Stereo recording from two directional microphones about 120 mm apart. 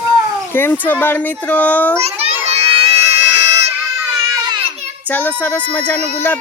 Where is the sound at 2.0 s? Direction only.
60° right (ahead or behind).